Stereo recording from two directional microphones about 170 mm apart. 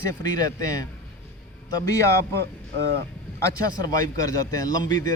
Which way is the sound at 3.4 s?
20° left (ahead or behind).